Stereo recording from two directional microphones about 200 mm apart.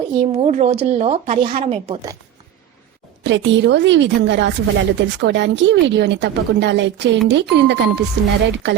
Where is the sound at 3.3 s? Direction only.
65° right (ahead or behind).